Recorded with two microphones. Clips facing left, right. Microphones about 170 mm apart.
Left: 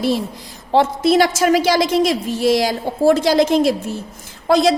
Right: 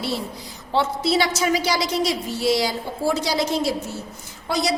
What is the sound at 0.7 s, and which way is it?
Speech, 50° left (ahead or behind).